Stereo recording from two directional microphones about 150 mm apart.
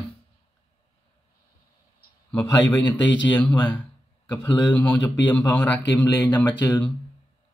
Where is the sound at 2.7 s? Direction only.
10° left (ahead or behind).